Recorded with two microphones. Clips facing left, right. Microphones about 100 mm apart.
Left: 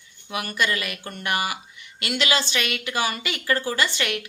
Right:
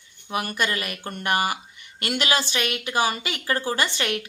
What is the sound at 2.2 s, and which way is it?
Speech, 15° right (ahead or behind).